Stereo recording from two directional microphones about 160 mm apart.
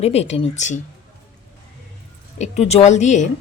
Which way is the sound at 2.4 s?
45° left (ahead or behind).